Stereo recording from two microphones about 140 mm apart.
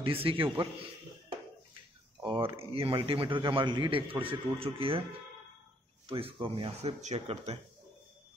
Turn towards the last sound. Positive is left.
turn(degrees=-45)  # may be behind; listen again after turning